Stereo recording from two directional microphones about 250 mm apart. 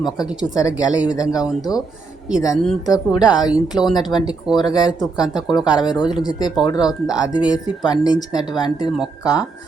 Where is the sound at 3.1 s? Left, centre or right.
Centre.